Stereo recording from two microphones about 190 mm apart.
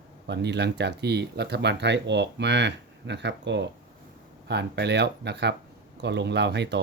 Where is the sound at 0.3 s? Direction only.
65° right (ahead or behind).